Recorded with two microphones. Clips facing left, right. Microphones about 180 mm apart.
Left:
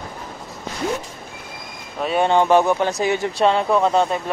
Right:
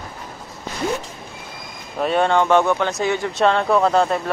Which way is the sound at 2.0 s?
Centre (ahead or behind).